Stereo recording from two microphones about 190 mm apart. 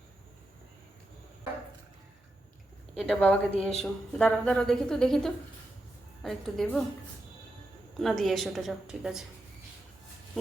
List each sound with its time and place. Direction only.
2.9 s a sound: centre (ahead or behind)
3.6 s a woman's voice: 5° left (ahead or behind)
7.9 s a woman's voice: centre (ahead or behind)